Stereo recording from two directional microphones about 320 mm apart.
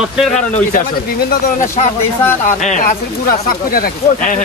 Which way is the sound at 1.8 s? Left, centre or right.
Left.